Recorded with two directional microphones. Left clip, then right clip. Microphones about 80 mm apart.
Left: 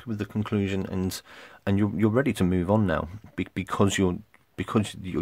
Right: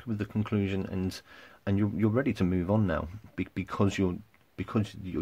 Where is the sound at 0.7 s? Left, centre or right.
Left.